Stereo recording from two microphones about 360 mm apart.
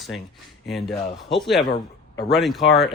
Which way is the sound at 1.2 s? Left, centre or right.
Centre.